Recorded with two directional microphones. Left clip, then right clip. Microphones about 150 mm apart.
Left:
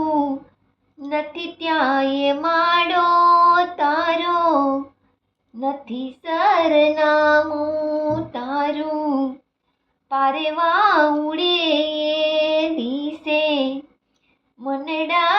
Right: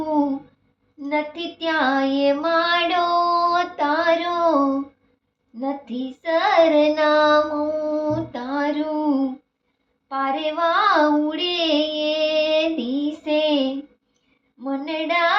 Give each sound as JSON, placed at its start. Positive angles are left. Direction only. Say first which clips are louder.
{"t": 1.0, "sound": "child singing", "louder": "even", "side_deg": 15}
{"t": 3.1, "sound": "female singing", "louder": "left 5 dB", "side_deg": -10}
{"t": 3.5, "sound": "female singing", "louder": "left 3 dB", "side_deg": 15}
{"t": 5.5, "sound": "child singing", "louder": "left 2 dB", "side_deg": 15}
{"t": 11.6, "sound": "music", "louder": "left 1 dB", "side_deg": 15}
{"t": 13.2, "sound": "child singing", "louder": "left 1 dB", "side_deg": 15}